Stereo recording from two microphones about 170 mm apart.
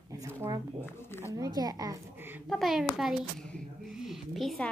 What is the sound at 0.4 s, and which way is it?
Speech, 25° right (ahead or behind).